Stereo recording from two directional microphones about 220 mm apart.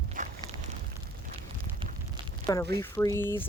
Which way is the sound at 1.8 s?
20° right (ahead or behind).